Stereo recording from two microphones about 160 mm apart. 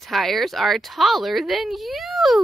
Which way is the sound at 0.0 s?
Centre (ahead or behind).